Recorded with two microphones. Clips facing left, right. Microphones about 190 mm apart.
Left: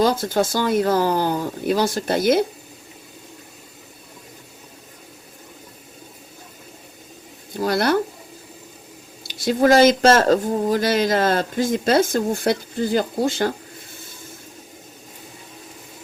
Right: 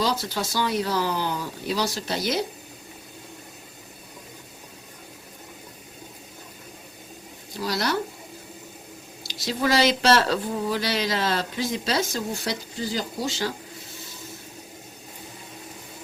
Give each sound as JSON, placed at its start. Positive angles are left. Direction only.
{"t": 0.0, "sound": "speech", "side_deg": 50}
{"t": 7.5, "sound": "speech", "side_deg": 55}
{"t": 9.2, "sound": "speech", "side_deg": 50}